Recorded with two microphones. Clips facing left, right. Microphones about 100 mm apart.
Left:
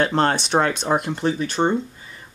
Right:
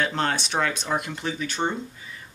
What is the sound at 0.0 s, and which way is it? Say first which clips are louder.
Speech: left 6 dB; 40° left (ahead or behind).